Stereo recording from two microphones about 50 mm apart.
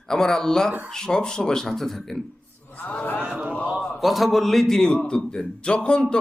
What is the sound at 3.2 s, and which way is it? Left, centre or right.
Speech, right.